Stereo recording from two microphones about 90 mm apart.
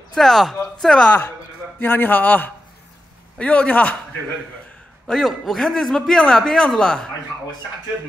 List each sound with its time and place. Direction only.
0.1 s a man's voice: 5° left (ahead or behind)
1.8 s a man's voice: 20° left (ahead or behind)
5.0 s a man's voice: centre (ahead or behind)